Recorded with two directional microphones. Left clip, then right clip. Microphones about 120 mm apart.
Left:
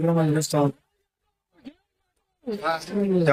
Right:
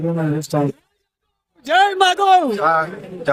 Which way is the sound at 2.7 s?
Centre (ahead or behind).